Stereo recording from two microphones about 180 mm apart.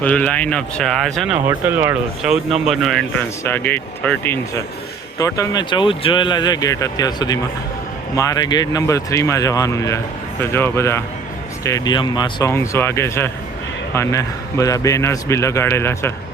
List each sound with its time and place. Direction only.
0.0 s speech: 5° left (ahead or behind)
1.5 s speech: 10° right (ahead or behind)
3.4 s a man's voice: 10° left (ahead or behind)